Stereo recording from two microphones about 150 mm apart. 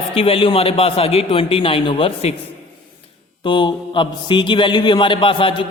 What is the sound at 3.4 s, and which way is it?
A man's voice, 30° left (ahead or behind).